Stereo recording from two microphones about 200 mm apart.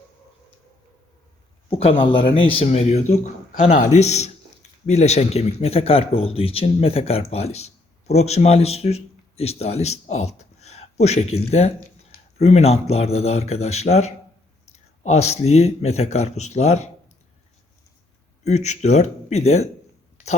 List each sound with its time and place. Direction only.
1.8 s speech: 25° left (ahead or behind)
18.4 s speech: 35° left (ahead or behind)